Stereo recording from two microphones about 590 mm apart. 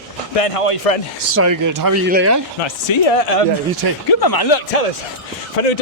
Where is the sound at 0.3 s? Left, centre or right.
Left.